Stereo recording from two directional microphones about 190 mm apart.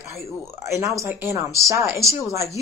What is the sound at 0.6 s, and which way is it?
A woman's voice, 15° right (ahead or behind).